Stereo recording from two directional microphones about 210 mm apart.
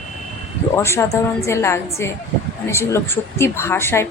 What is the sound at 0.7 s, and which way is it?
A woman's voice, 10° left (ahead or behind).